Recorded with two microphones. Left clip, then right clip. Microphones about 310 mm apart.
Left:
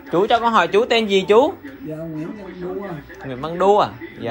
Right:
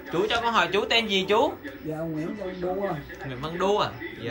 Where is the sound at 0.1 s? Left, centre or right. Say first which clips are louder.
Left 8 dB; centre.